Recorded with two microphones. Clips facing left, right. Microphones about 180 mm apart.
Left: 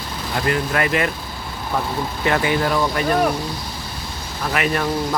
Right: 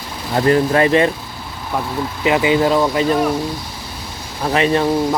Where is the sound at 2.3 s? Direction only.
15° right (ahead or behind).